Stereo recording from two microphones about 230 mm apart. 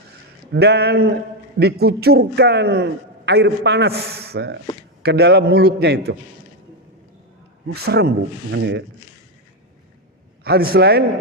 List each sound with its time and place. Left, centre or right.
0.5 s a man's voice: right
7.7 s a man's voice: right
10.4 s a man's voice: right